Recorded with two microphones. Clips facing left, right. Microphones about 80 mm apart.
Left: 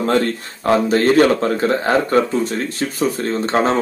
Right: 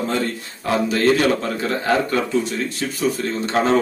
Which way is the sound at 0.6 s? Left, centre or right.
Left.